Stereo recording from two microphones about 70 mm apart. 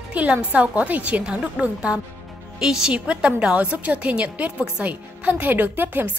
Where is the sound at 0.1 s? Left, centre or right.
Centre.